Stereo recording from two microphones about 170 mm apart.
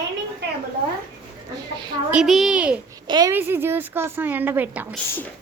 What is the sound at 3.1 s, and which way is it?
Speech, 25° right (ahead or behind).